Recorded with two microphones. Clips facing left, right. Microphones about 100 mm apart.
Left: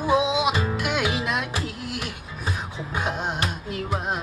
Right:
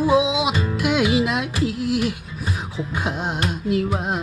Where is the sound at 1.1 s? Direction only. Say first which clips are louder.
Right 6 dB; 45° left (ahead or behind).